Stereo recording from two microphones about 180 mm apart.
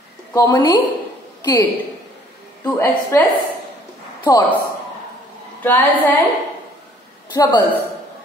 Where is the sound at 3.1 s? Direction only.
15° left (ahead or behind).